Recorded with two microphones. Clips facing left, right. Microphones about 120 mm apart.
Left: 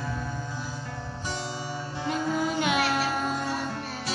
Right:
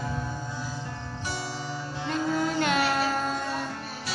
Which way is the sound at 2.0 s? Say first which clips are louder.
Even; 5° left (ahead or behind).